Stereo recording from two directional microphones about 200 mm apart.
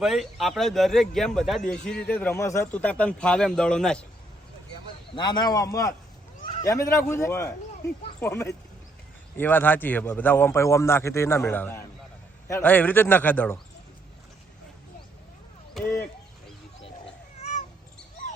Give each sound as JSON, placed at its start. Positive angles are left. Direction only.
{"t": 0.0, "sound": "a man's voice", "side_deg": 0}
{"t": 5.1, "sound": "a man's voice", "side_deg": 20}